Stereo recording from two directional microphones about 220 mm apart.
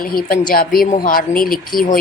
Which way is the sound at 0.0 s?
40° left (ahead or behind).